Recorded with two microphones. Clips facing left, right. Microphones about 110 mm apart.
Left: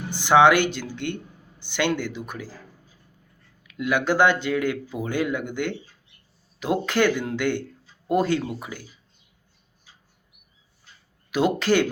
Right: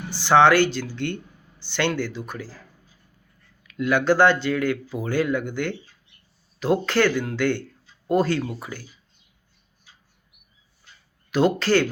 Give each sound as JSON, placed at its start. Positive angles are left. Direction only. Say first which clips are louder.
{"t": 0.1, "sound": "speech", "louder": "even", "side_deg": 15}
{"t": 3.6, "sound": "speech", "louder": "right 2 dB", "side_deg": 10}
{"t": 11.3, "sound": "speech", "louder": "right 1 dB", "side_deg": 10}